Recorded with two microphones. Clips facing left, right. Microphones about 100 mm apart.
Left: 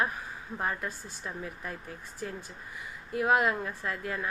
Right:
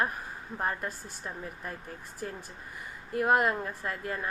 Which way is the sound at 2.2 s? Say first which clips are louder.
Even; 45° right (ahead or behind).